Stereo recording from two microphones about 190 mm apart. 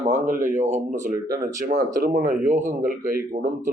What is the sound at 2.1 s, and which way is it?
Speech, 45° right (ahead or behind).